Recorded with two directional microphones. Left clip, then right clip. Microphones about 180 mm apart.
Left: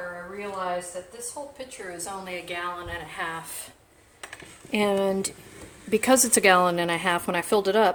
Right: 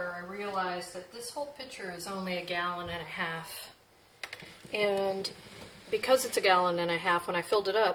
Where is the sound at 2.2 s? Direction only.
35° left (ahead or behind).